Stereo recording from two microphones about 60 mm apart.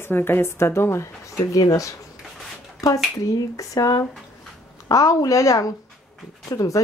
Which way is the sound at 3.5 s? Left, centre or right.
Left.